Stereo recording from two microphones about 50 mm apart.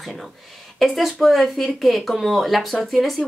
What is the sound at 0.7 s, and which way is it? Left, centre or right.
A woman's voice, centre.